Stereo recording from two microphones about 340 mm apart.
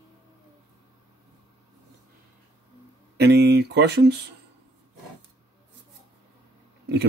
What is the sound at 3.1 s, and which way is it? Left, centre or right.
Speech, right.